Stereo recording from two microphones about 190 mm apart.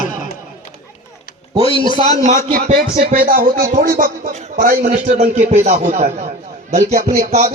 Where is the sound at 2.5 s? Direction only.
45° right (ahead or behind).